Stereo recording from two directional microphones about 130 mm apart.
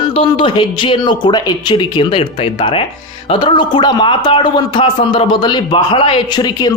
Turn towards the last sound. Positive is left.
turn(degrees=30)  # may be behind; listen again after turning